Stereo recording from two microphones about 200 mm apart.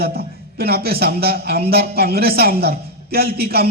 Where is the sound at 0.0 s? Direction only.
50° right (ahead or behind).